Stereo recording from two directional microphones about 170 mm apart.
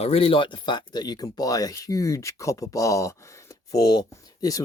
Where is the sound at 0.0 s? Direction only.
35° left (ahead or behind).